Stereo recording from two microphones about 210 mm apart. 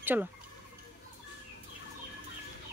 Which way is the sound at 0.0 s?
10° right (ahead or behind).